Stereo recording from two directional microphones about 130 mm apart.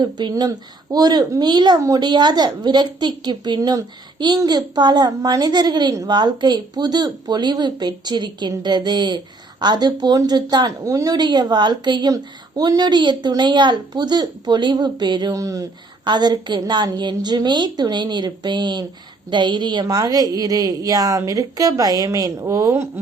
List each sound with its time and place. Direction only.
0.0 s a child's voice: 35° right (ahead or behind)